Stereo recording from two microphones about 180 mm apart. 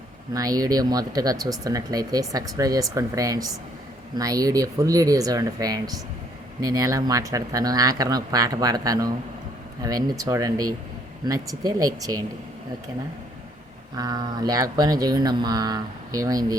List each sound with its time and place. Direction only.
0.3 s speech: 20° right (ahead or behind)
13.9 s speech: 20° right (ahead or behind)